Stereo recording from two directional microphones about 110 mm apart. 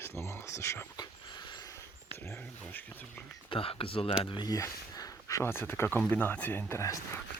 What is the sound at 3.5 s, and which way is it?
Speech, 60° left (ahead or behind).